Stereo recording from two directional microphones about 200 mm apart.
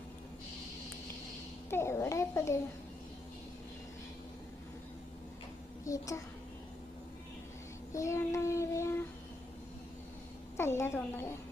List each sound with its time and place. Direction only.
1.7 s a child's voice: 10° left (ahead or behind)
5.9 s a child's voice: 15° left (ahead or behind)
7.9 s child singing: 15° left (ahead or behind)
10.6 s a child's voice: 10° left (ahead or behind)